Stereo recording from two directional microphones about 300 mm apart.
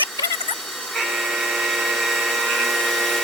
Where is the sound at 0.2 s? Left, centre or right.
Centre.